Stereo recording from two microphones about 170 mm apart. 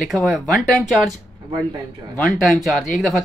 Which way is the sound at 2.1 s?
Centre (ahead or behind).